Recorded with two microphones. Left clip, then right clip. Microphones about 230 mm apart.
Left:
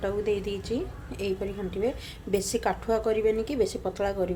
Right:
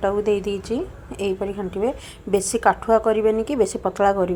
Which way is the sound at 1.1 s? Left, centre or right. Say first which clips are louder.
Right 7 dB; centre.